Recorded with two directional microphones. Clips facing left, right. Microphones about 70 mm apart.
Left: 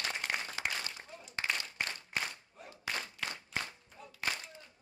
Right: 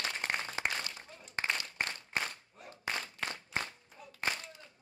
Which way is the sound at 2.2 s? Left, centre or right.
Right.